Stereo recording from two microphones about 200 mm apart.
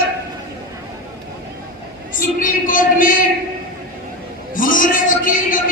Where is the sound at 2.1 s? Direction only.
40° left (ahead or behind).